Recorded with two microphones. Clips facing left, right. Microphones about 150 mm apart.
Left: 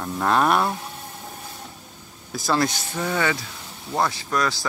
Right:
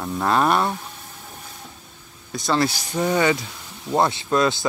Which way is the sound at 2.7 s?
15° right (ahead or behind).